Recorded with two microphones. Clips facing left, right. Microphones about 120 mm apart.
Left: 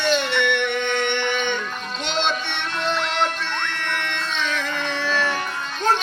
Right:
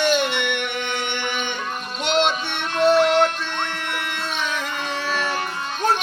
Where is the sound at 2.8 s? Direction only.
45° right (ahead or behind).